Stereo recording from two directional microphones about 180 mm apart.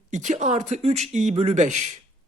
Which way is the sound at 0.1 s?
40° right (ahead or behind).